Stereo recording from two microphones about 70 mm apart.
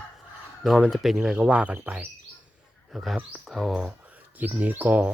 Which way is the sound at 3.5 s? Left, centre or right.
Centre.